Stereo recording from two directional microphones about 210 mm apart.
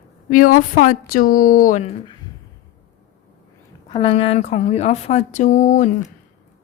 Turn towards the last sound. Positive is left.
turn(degrees=35)  # may be behind; listen again after turning